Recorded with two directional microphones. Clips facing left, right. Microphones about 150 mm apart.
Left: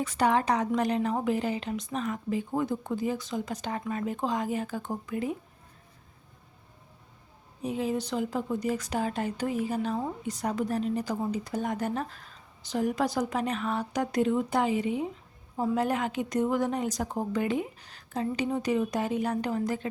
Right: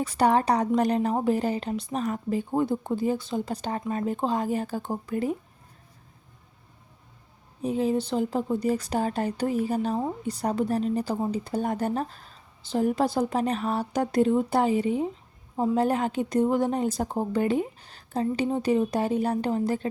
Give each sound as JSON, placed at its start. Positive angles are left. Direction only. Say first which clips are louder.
{"t": 0.0, "sound": "a woman's voice", "louder": "right 3 dB", "side_deg": -35}
{"t": 7.6, "sound": "a woman's voice", "louder": "right 5 dB", "side_deg": -30}